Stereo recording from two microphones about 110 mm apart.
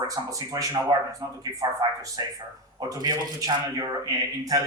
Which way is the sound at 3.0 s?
35° right (ahead or behind).